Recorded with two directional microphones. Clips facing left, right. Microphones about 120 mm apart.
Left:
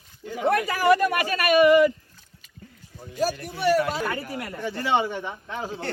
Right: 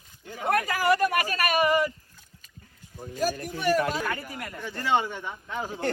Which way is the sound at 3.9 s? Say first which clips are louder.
Left 2 dB; 15° left (ahead or behind).